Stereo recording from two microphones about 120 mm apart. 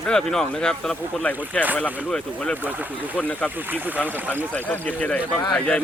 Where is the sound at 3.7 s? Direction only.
15° right (ahead or behind).